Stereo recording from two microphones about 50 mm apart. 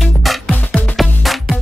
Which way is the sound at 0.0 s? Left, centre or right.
Centre.